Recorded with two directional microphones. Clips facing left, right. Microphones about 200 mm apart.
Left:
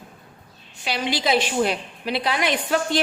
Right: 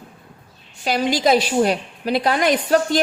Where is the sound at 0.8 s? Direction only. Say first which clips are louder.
Right 6 dB; 45° right (ahead or behind).